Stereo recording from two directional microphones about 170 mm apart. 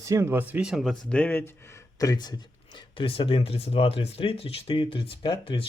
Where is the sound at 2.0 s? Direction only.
20° left (ahead or behind).